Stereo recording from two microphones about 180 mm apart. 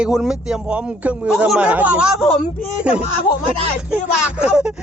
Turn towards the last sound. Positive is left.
turn(degrees=-5)  # may be behind; listen again after turning